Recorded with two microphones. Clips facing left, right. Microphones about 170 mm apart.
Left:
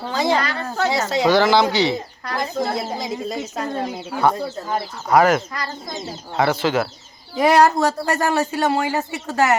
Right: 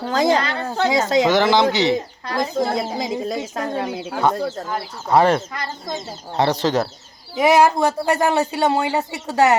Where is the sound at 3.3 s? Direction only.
90° right.